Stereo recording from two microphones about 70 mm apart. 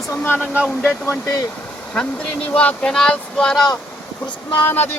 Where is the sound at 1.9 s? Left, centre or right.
Centre.